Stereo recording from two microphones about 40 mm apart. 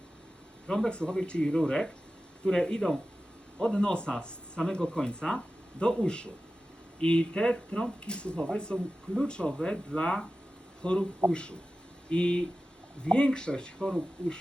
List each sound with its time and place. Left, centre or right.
0.9 s speech: left